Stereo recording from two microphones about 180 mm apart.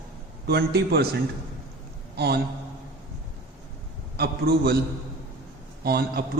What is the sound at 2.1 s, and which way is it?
Speech, 65° right (ahead or behind).